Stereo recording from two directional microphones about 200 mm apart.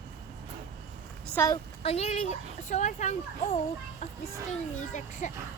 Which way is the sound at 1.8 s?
30° left (ahead or behind).